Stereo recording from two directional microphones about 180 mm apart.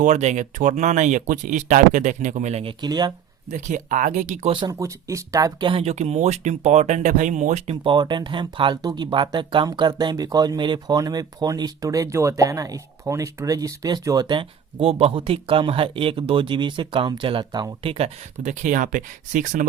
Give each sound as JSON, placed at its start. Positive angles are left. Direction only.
{"t": 0.0, "sound": "speech", "side_deg": -40}
{"t": 2.8, "sound": "speech", "side_deg": -25}
{"t": 3.5, "sound": "speech", "side_deg": -45}
{"t": 4.5, "sound": "speech", "side_deg": -20}
{"t": 7.9, "sound": "speech", "side_deg": -25}